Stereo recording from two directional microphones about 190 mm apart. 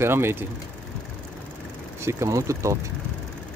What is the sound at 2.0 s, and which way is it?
Speech, 15° right (ahead or behind).